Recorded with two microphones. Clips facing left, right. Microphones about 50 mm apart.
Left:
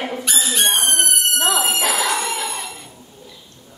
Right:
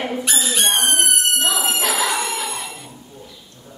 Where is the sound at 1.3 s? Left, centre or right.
Left.